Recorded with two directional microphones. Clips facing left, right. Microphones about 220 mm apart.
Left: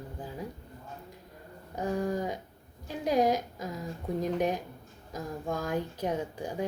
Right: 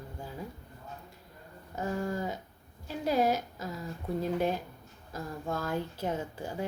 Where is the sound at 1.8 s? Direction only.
15° left (ahead or behind).